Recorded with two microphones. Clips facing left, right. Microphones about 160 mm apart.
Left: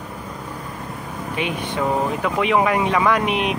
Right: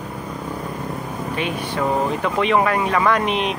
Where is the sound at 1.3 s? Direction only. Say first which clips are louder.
Left 1 dB; 15° left (ahead or behind).